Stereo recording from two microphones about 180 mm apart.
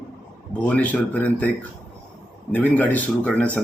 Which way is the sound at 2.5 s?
10° left (ahead or behind).